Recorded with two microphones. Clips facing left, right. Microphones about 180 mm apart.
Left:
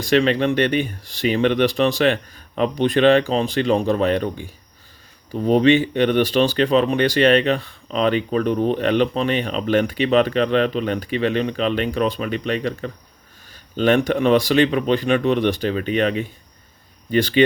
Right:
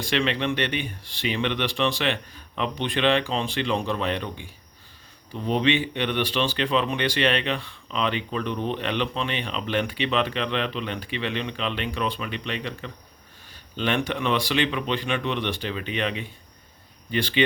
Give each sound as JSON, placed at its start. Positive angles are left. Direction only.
{"t": 0.0, "sound": "speech", "side_deg": 40}